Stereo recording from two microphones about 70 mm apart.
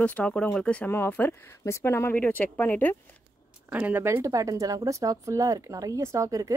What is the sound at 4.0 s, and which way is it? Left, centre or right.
Speech, right.